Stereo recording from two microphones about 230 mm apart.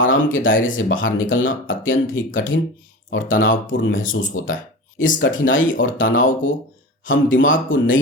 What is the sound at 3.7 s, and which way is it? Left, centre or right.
Speech, left.